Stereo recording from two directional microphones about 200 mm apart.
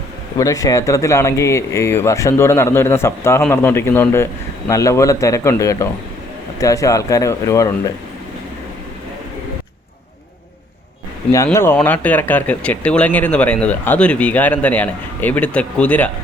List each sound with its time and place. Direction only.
0.3 s speech: 15° left (ahead or behind)
11.3 s speech: 15° left (ahead or behind)